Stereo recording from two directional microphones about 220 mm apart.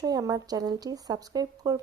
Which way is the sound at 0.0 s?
15° right (ahead or behind).